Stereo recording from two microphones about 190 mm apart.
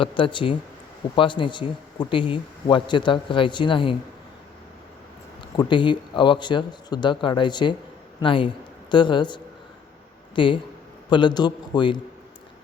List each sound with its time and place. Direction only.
0.0 s speech: 25° left (ahead or behind)
5.5 s speech: 25° left (ahead or behind)